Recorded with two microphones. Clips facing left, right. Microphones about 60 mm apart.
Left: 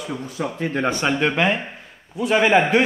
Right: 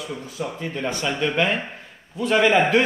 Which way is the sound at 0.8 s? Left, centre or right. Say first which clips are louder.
Left 3 dB; left.